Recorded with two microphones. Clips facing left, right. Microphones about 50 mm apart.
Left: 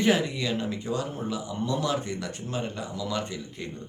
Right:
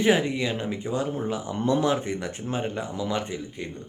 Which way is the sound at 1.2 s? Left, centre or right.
Right.